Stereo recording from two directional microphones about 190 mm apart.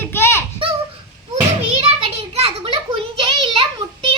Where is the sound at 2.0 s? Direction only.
30° right (ahead or behind).